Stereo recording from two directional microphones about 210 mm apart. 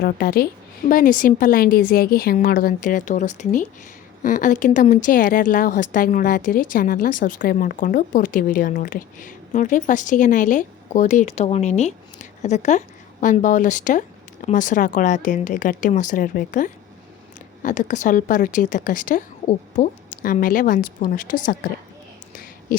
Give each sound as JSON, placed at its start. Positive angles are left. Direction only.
{"t": 0.0, "sound": "a woman's voice", "side_deg": 45}